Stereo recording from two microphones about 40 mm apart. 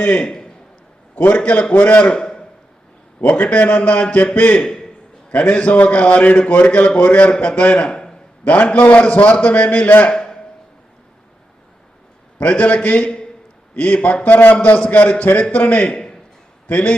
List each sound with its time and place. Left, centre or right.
0.2 s a man's voice: centre
1.1 s a man's voice: left
2.1 s a sound: centre
3.4 s a man's voice: left
4.6 s a sound: centre
5.3 s a man's voice: left
8.4 s a man's voice: left
10.1 s a man's voice: centre
12.4 s a man's voice: left
14.3 s a man's voice: left
14.5 s a man's voice: left
15.9 s a sound: left
16.6 s a man's voice: left